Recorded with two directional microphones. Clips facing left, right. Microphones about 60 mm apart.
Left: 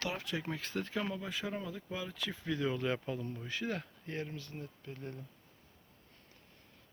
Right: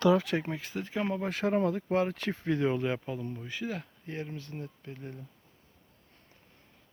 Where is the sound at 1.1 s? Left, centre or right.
Right.